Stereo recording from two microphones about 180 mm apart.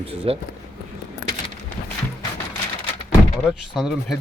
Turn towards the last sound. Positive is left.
turn(degrees=0)  # may be behind; listen again after turning